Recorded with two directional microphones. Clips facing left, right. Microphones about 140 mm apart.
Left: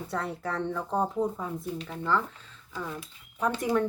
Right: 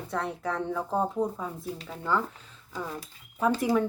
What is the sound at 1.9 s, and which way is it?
Speech, 10° right (ahead or behind).